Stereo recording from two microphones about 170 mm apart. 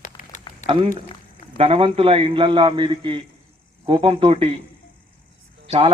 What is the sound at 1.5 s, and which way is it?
A man's voice, 30° right (ahead or behind).